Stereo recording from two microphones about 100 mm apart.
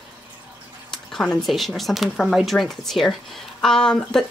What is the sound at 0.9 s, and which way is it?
Speech, 5° left (ahead or behind).